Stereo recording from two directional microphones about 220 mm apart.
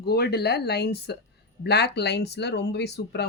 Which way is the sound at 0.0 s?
45° left (ahead or behind).